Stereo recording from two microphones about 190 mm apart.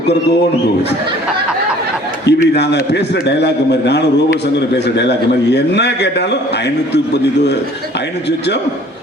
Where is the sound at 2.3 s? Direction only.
65° left (ahead or behind).